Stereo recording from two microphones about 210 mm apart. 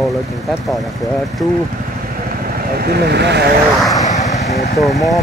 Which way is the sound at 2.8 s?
50° right (ahead or behind).